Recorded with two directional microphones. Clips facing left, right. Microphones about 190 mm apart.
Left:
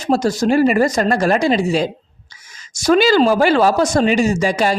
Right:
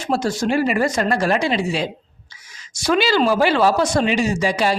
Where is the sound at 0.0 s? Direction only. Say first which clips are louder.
Left 4 dB; 40° left (ahead or behind).